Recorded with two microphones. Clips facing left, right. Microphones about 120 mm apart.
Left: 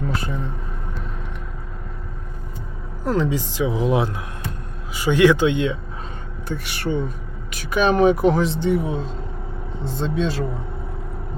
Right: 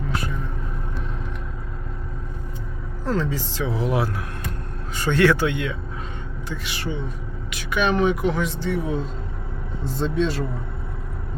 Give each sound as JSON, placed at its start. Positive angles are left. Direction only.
{"t": 0.1, "sound": "vehicle", "side_deg": 30}
{"t": 3.0, "sound": "speech", "side_deg": 15}
{"t": 6.5, "sound": "speech", "side_deg": 50}
{"t": 7.5, "sound": "speech", "side_deg": 40}
{"t": 9.8, "sound": "speech", "side_deg": 0}